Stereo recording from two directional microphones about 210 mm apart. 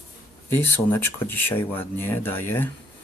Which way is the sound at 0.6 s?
10° left (ahead or behind).